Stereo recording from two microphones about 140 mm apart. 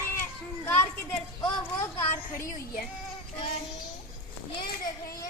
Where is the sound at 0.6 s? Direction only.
10° left (ahead or behind).